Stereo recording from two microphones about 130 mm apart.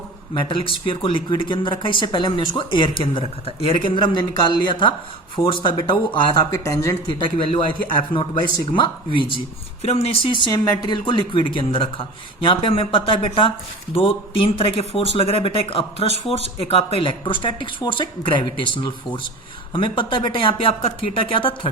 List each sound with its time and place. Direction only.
0.3 s speech: 40° left (ahead or behind); by 6.9 s 25° left (ahead or behind)
7.1 s speech: 40° left (ahead or behind)
8.1 s speech: 15° left (ahead or behind)
8.6 s speech: 40° left (ahead or behind)
9.8 s speech: 50° left (ahead or behind)